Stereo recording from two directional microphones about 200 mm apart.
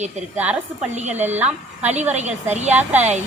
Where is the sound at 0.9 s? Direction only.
35° right (ahead or behind).